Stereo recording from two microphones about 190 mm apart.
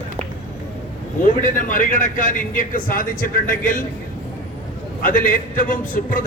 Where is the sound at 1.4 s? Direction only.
45° left (ahead or behind).